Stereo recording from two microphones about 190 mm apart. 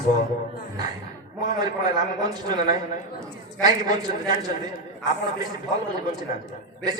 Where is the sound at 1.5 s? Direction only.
20° right (ahead or behind).